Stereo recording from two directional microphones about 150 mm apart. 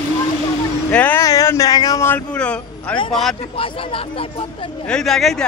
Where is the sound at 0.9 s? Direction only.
10° left (ahead or behind).